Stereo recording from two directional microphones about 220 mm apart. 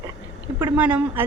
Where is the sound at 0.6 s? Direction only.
5° right (ahead or behind).